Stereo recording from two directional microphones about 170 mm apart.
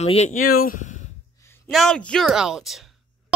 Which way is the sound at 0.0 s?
40° left (ahead or behind).